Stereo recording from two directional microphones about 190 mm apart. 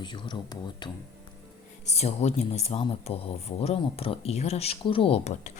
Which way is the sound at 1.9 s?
35° left (ahead or behind).